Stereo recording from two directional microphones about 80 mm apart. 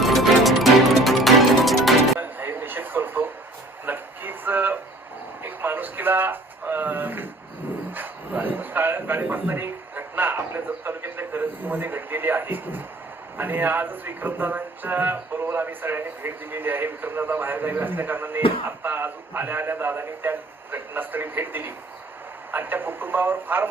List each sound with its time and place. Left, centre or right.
0.0 s music: centre
2.1 s a sound: right
9.2 s a man's voice: right